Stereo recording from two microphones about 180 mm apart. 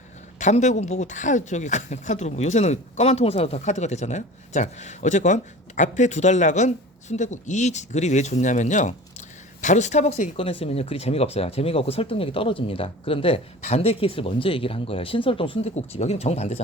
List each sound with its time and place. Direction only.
0.3 s speech: 40° left (ahead or behind)